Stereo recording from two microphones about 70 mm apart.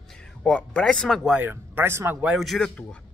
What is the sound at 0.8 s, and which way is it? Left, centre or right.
Speech, centre.